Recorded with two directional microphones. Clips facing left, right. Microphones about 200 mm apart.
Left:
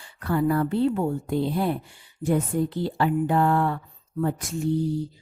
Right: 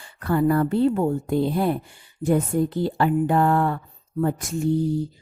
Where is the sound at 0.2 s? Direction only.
50° right (ahead or behind).